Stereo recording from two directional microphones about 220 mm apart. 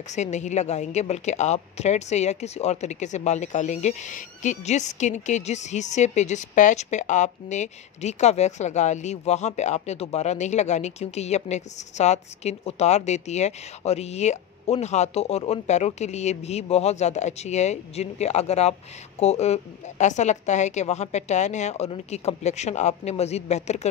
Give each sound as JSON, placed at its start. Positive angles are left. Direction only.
{"t": 0.1, "sound": "a woman's voice", "side_deg": 30}